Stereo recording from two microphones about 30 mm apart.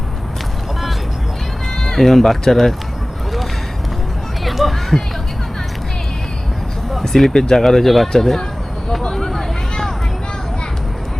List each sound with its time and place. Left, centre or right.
2.0 s speech: centre
4.4 s a sound: centre
7.3 s speech: left
7.6 s speech: centre
8.9 s vehicle: centre